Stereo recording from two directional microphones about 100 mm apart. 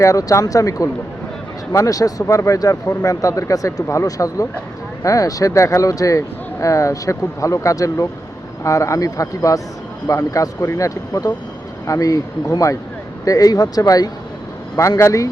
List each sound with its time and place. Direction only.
0.0 s speech: 35° left (ahead or behind)